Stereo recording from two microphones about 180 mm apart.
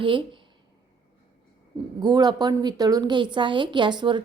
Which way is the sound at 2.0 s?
25° right (ahead or behind).